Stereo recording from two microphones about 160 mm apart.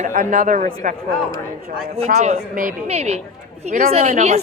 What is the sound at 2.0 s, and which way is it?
Speech, 45° right (ahead or behind).